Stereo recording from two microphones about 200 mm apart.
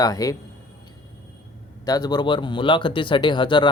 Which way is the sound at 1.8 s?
20° left (ahead or behind).